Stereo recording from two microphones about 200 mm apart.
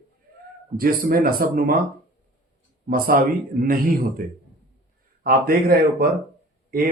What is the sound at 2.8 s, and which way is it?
Speech, 45° right (ahead or behind).